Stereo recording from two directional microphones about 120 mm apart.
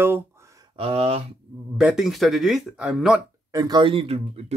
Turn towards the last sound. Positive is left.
turn(degrees=-55)  # may be behind; listen again after turning